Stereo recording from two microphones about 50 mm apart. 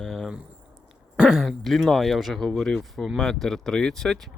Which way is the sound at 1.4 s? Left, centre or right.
Centre.